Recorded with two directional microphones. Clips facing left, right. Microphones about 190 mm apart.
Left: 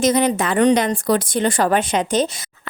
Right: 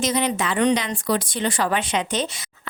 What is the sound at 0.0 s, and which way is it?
Speech, 45° left (ahead or behind).